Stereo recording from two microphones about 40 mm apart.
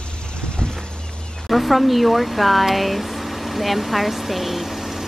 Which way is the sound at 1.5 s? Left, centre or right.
Centre.